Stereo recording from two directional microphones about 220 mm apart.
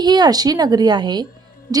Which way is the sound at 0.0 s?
20° right (ahead or behind).